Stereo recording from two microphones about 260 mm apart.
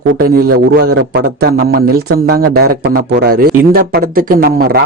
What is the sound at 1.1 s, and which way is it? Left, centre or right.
Speech, right.